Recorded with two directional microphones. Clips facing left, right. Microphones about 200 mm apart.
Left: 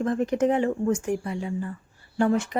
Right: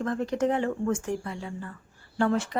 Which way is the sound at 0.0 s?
20° left (ahead or behind).